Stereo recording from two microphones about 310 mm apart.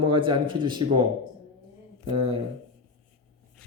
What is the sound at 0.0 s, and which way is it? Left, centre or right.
A man's voice, centre.